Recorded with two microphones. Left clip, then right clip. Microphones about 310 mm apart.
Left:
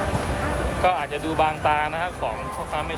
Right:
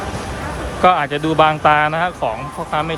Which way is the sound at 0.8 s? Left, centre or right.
Right.